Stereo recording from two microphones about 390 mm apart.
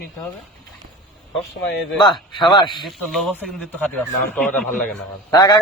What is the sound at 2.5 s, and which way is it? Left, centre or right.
Speech, centre.